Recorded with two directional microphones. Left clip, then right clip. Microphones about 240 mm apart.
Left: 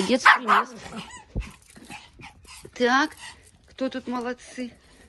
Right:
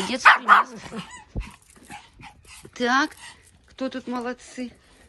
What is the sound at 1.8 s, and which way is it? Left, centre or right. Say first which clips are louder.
Dog: right 1 dB; centre.